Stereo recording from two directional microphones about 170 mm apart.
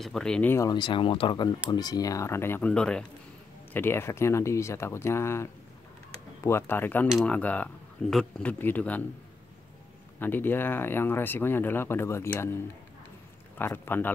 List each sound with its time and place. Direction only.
0.0 s speech: 5° left (ahead or behind)
7.1 s speech: centre (ahead or behind)
7.3 s speech: 10° left (ahead or behind)
10.1 s speech: 10° left (ahead or behind)
13.6 s speech: 10° left (ahead or behind)